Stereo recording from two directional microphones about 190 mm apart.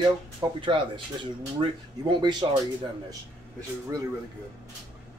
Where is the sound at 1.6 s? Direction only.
25° right (ahead or behind).